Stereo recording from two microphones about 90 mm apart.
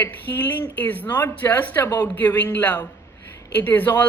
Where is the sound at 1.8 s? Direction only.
45° left (ahead or behind).